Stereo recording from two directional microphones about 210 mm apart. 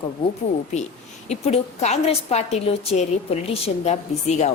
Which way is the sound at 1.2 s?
30° left (ahead or behind).